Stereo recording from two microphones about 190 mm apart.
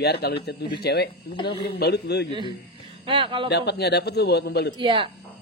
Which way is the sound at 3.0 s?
30° right (ahead or behind).